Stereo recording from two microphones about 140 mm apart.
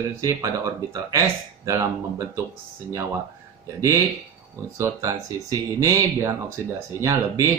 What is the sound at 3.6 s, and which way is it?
Speech, 20° right (ahead or behind).